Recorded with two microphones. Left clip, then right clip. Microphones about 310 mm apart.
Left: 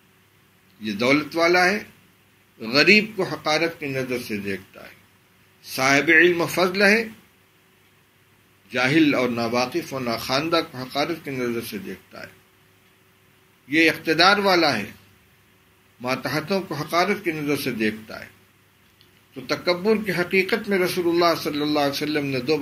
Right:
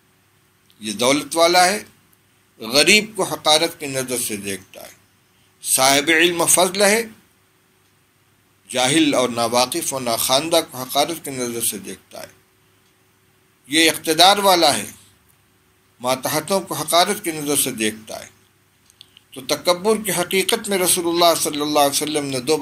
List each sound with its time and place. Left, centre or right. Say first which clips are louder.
0.7 s speech: right 2 dB; right
5.6 s speech: right 3 dB; right
8.6 s speech: right 2 dB; right
13.7 s speech: right 2 dB; right
16.0 s speech: right 4 dB; right
19.4 s speech: right 4 dB; right